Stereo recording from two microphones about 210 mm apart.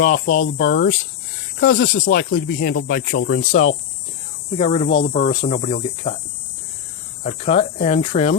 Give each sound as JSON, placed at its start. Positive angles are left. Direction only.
{"t": 0.0, "sound": "speech", "side_deg": 40}
{"t": 4.5, "sound": "speech", "side_deg": 30}
{"t": 7.3, "sound": "speech", "side_deg": 25}